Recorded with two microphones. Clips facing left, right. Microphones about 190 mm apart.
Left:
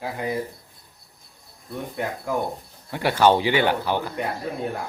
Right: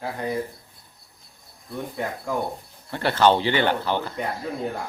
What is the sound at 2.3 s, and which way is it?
A man's voice, 5° left (ahead or behind).